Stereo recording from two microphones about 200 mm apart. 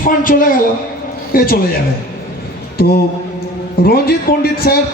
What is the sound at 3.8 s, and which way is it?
Speech, 50° left (ahead or behind).